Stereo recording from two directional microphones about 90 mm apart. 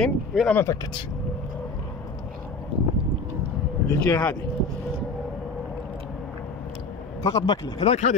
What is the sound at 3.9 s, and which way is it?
Speech, 35° left (ahead or behind).